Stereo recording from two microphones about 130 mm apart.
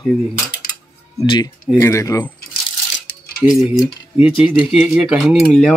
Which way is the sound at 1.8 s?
25° left (ahead or behind).